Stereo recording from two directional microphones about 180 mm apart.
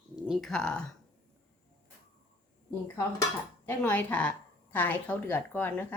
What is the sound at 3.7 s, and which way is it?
A woman's voice, 10° left (ahead or behind).